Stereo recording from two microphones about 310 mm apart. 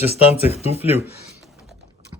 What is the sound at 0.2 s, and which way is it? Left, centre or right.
Speech, centre.